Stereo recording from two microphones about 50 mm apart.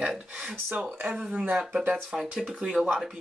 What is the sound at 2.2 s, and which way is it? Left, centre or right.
Speech, centre.